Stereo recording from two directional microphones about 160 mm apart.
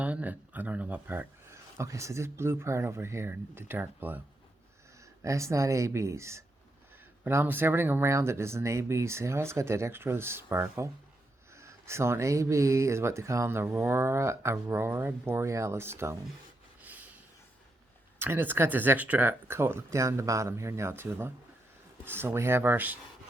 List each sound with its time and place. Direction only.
0.0 s speech: 10° right (ahead or behind)
16.8 s a sound: 10° right (ahead or behind)
18.2 s speech: 15° right (ahead or behind)